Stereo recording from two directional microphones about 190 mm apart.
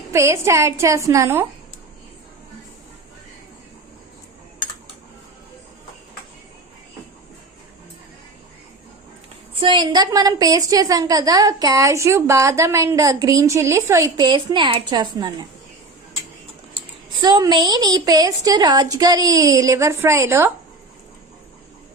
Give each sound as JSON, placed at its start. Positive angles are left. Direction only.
{"t": 0.1, "sound": "a woman's voice", "side_deg": -15}
{"t": 9.6, "sound": "a woman's voice", "side_deg": -25}
{"t": 17.2, "sound": "a woman's voice", "side_deg": -25}